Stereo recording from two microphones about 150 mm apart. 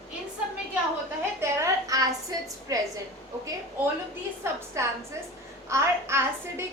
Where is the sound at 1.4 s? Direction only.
20° right (ahead or behind).